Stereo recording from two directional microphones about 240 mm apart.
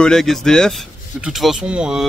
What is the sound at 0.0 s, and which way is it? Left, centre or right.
A man's voice, centre.